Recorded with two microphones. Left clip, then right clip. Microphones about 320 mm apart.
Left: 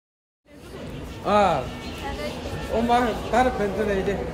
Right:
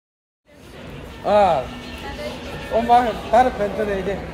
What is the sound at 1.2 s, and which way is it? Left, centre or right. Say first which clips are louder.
Speech: right 4 dB; centre.